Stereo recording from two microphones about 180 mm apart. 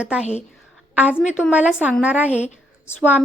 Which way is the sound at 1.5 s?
5° right (ahead or behind).